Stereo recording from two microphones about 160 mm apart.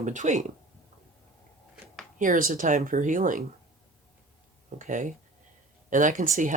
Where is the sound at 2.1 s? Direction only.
55° right (ahead or behind).